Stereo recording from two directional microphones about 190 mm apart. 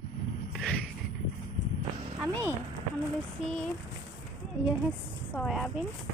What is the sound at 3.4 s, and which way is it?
Speech, centre (ahead or behind).